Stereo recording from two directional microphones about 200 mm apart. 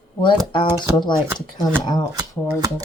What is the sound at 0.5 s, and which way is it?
Speech, 25° left (ahead or behind).